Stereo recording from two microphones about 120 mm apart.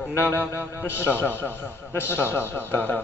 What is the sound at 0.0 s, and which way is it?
A man's voice, 15° left (ahead or behind).